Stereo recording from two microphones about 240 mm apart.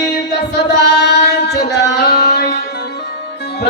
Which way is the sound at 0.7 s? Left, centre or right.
Left.